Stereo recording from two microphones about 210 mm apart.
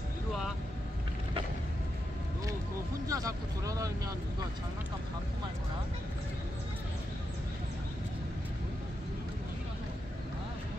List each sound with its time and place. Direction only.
3.1 s vehicle: 15° right (ahead or behind)